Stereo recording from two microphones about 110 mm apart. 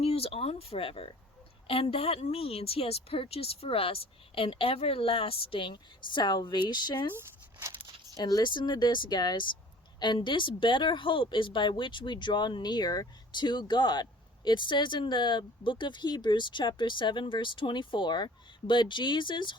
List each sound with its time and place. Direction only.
0.0 s a woman's voice: 65° left (ahead or behind); by 7.1 s 40° left (ahead or behind)
8.1 s a woman's voice: 40° left (ahead or behind)